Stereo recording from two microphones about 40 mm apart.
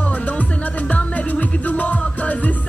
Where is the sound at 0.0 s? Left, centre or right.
Left.